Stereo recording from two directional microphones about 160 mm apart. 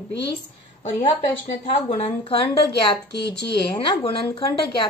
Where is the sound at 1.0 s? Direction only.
30° left (ahead or behind).